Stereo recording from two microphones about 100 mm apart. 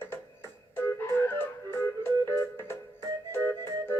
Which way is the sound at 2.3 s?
20° left (ahead or behind).